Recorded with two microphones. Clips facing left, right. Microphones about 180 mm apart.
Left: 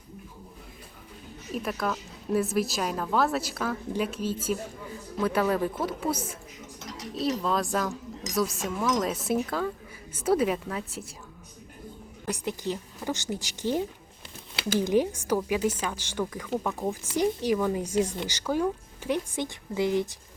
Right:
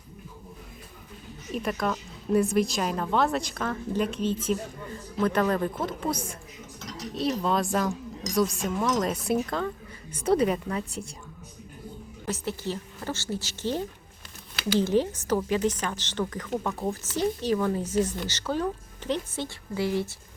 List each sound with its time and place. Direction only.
1.5 s a woman's voice: centre (ahead or behind)
8.7 s speech: 10° right (ahead or behind)
9.0 s a woman's voice: centre (ahead or behind)
12.2 s speech: 15° left (ahead or behind)